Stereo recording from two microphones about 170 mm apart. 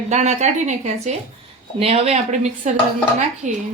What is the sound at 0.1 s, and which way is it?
A woman's voice, 45° right (ahead or behind).